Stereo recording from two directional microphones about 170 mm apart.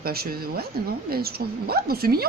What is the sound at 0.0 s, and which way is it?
A woman's voice, 65° right (ahead or behind).